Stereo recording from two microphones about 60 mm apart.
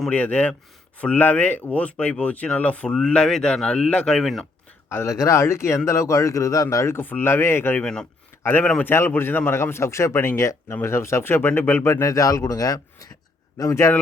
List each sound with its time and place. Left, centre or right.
0.1 s speech: left
5.0 s speech: left
6.9 s speech: left
7.8 s speech: centre
8.8 s speech: left
10.3 s speech: left
10.8 s speech: left
11.9 s speech: left
13.8 s speech: left